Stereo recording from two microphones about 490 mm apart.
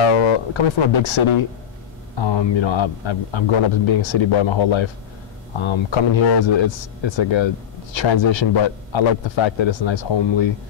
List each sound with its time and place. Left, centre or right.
0.0 s guitar: left
2.1 s speech: left